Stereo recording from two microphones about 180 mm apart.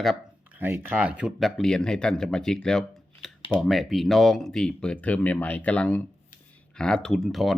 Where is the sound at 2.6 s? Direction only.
5° left (ahead or behind).